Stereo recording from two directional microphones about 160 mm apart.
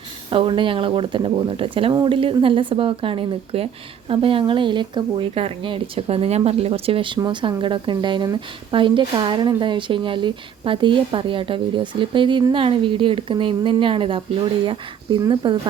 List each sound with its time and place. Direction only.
0.3 s a woman's voice: 35° right (ahead or behind)